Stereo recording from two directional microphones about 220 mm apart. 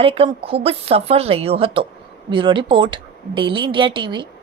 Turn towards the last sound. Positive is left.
turn(degrees=-20)  # may be behind; listen again after turning